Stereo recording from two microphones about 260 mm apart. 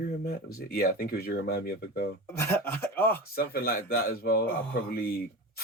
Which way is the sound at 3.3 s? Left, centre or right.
Left.